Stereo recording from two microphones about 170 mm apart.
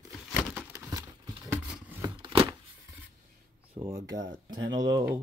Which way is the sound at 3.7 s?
35° right (ahead or behind).